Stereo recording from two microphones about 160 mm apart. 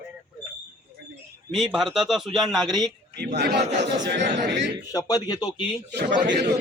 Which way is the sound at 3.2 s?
90° right.